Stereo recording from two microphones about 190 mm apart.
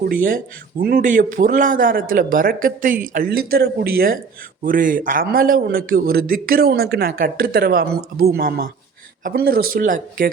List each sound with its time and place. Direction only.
0.0 s a man's voice: 50° right (ahead or behind)